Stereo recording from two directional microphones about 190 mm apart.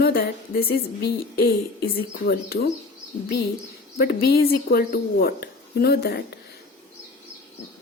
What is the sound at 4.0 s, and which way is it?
A woman's voice, 55° left (ahead or behind).